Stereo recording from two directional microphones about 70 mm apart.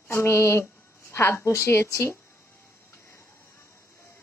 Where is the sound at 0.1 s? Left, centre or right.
Left.